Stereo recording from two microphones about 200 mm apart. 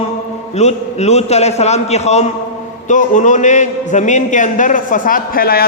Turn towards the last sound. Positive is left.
turn(degrees=50)  # may be behind; listen again after turning